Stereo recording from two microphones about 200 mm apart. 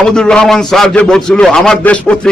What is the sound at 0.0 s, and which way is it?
Speech, 5° left (ahead or behind).